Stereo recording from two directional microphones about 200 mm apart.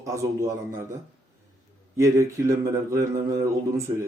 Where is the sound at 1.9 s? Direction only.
15° right (ahead or behind).